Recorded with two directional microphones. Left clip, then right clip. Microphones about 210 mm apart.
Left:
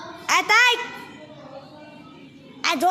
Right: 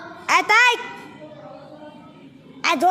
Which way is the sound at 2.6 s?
5° right (ahead or behind).